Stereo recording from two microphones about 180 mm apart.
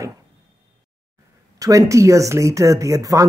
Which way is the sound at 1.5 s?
20° right (ahead or behind).